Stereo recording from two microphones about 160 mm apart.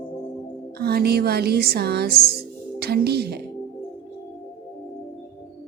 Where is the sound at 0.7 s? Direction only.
80° right.